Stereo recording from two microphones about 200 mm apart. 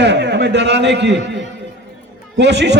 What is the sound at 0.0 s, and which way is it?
A man's voice, 60° right (ahead or behind).